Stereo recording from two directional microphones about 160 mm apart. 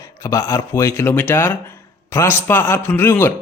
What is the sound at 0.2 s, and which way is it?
Speech, 20° left (ahead or behind).